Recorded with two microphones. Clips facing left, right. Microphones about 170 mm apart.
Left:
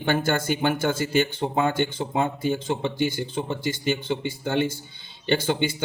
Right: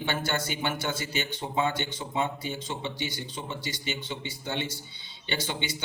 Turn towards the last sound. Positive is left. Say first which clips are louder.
# left 10 dB
turn(degrees=50)  # may be behind; listen again after turning